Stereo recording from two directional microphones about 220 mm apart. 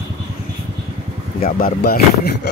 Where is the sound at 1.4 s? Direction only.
45° left (ahead or behind).